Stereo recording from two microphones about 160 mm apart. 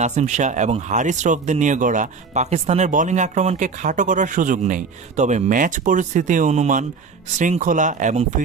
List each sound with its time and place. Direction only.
0.0 s speech: 45° right (ahead or behind)